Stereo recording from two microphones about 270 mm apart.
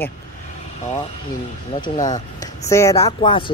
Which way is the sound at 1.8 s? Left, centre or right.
Centre.